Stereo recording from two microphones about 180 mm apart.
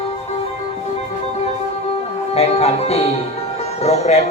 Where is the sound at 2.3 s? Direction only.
35° left (ahead or behind).